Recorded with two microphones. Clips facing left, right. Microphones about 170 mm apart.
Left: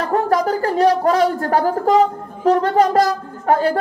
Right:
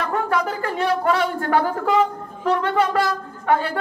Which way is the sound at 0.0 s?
40° left (ahead or behind).